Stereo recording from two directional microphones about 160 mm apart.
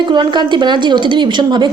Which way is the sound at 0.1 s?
30° right (ahead or behind).